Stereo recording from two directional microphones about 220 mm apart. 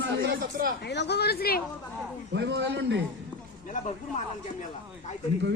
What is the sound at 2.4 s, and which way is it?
Speech, 50° right (ahead or behind).